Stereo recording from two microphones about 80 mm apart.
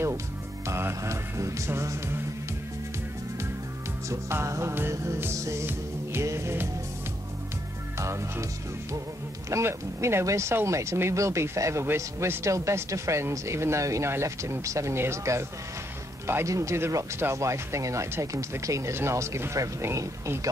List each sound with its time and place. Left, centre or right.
0.7 s speech: right
4.1 s speech: right
8.0 s speech: right
9.5 s speech: right